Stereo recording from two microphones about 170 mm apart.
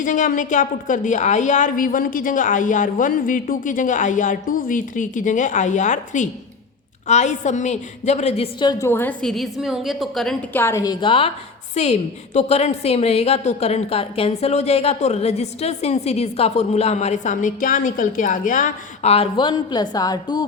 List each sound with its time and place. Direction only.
0.0 s a woman's voice: 50° left (ahead or behind)
8.5 s a woman's voice: 25° left (ahead or behind)
8.9 s a woman's voice: 10° left (ahead or behind)
10.6 s a woman's voice: 15° left (ahead or behind)
11.0 s a woman's voice: 30° left (ahead or behind)